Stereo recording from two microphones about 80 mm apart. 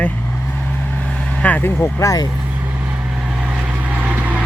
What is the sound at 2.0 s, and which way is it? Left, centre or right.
Speech, left.